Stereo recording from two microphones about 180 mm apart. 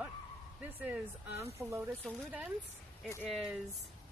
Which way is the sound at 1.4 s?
15° right (ahead or behind).